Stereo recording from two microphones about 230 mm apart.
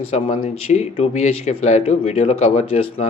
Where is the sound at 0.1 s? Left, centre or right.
Left.